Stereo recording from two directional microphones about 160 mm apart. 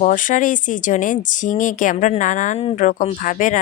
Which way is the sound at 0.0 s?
55° left (ahead or behind).